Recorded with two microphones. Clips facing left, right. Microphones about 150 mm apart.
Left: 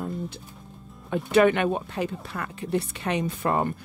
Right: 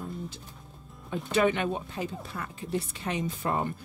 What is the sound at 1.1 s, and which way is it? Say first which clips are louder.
Speech: left 6 dB; 65° left (ahead or behind).